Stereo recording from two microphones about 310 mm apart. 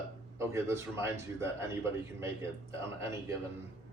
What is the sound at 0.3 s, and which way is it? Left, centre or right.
A man's voice, centre.